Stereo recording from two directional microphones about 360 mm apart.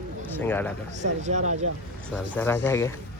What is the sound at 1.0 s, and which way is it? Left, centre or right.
Speech, centre.